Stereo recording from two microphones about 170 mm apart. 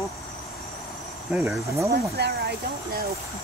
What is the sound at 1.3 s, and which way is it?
Speech, 10° right (ahead or behind).